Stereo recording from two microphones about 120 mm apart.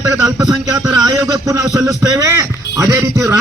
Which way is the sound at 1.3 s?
30° right (ahead or behind).